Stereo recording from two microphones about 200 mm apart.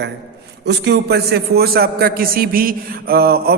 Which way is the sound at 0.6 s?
60° right (ahead or behind).